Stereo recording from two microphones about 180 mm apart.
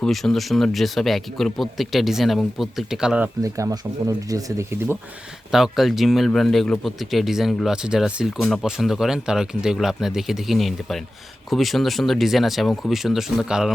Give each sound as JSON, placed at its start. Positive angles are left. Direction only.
{"t": 0.0, "sound": "a man's voice", "side_deg": 0}
{"t": 3.4, "sound": "speech", "side_deg": -20}
{"t": 5.5, "sound": "a man's voice", "side_deg": 0}